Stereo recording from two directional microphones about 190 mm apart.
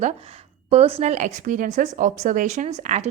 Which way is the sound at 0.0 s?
35° right (ahead or behind).